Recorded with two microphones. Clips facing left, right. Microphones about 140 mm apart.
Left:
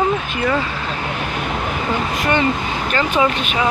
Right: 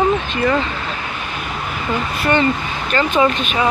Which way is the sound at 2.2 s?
15° left (ahead or behind).